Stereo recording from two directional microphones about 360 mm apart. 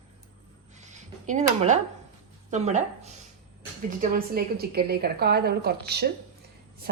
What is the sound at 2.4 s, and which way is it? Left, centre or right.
A woman's voice, centre.